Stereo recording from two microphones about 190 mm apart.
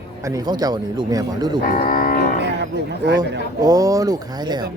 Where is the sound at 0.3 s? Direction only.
20° right (ahead or behind).